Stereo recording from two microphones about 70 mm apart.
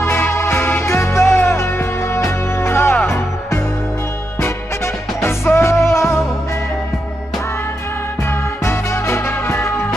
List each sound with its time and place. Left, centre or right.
0.0 s music: left
5.2 s music: left
8.6 s music: left